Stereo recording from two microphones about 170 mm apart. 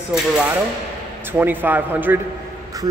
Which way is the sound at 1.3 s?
10° right (ahead or behind).